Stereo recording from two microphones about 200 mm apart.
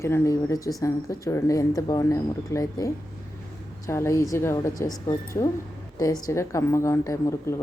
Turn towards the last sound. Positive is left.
turn(degrees=15)  # may be behind; listen again after turning